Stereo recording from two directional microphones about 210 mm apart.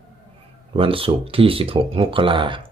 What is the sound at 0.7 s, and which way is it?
Speech, 25° right (ahead or behind).